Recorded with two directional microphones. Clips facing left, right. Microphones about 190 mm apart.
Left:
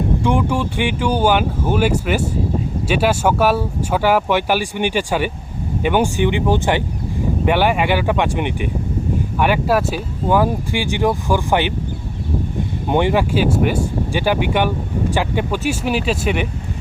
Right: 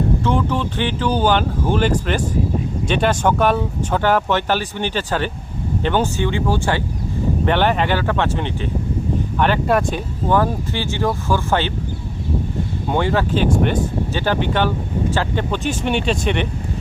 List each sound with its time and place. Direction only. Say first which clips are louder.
0.2 s speech: left 2 dB; 15° left (ahead or behind)
12.9 s speech: left 2 dB; 15° left (ahead or behind)